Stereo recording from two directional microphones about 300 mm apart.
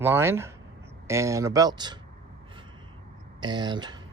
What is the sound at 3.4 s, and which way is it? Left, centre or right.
Speech, centre.